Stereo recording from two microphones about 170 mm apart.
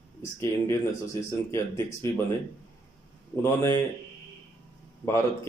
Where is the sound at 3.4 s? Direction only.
15° left (ahead or behind).